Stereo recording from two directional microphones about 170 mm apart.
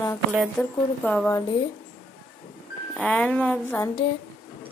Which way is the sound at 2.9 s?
10° left (ahead or behind).